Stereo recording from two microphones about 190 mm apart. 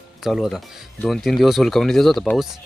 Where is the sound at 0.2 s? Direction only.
Centre (ahead or behind).